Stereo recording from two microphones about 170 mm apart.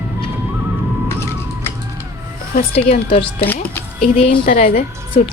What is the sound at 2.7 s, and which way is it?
Speech, 40° left (ahead or behind).